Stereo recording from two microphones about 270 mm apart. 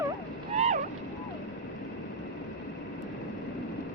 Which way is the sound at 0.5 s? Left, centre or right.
Right.